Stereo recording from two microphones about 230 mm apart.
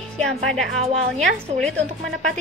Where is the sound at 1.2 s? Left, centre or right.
Centre.